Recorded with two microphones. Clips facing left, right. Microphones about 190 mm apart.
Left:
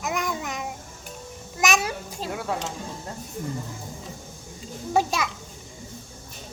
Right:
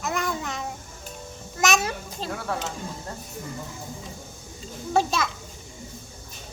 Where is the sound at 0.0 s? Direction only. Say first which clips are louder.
Even; 15° left (ahead or behind).